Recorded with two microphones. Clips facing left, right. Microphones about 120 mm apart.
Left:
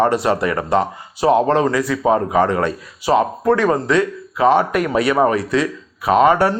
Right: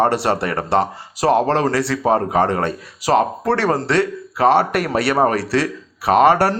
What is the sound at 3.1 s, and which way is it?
Speech, 55° right (ahead or behind).